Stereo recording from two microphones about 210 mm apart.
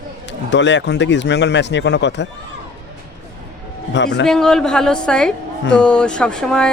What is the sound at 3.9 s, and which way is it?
Speech, 55° left (ahead or behind).